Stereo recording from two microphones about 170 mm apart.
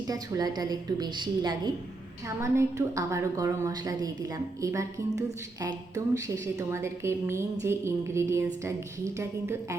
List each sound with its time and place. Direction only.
0.1 s a woman's voice: 25° right (ahead or behind)